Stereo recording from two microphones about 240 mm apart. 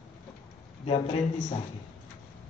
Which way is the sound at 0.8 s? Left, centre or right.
Left.